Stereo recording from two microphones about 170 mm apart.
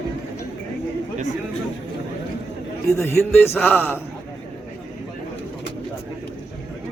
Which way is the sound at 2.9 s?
15° left (ahead or behind).